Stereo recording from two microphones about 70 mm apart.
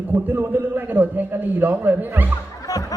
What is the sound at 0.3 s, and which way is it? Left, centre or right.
A man's voice, right.